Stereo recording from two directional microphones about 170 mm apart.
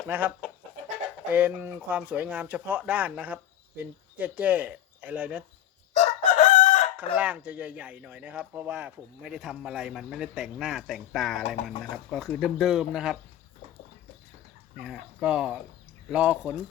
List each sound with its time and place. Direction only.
0.1 s speech: 10° right (ahead or behind)
6.0 s chicken: 40° left (ahead or behind)
6.9 s speech: 10° right (ahead or behind)
11.4 s speech: 35° left (ahead or behind)
11.8 s speech: centre (ahead or behind)
14.8 s speech: 5° right (ahead or behind)